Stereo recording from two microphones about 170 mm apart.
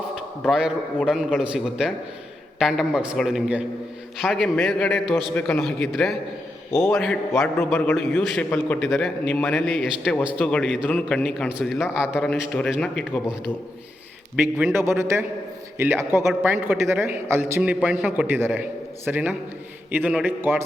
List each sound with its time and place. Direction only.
0.2 s a man's voice: 5° right (ahead or behind)
6.7 s a man's voice: 15° left (ahead or behind)
6.9 s a man's voice: centre (ahead or behind)
14.3 s a man's voice: 10° right (ahead or behind)